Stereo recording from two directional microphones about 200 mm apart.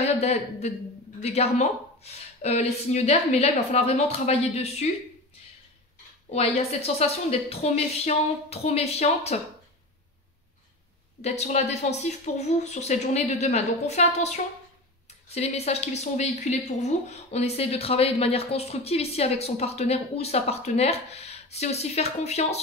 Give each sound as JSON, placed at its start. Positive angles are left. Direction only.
{"t": 0.0, "sound": "speech", "side_deg": 30}
{"t": 6.3, "sound": "speech", "side_deg": 30}
{"t": 11.2, "sound": "speech", "side_deg": 35}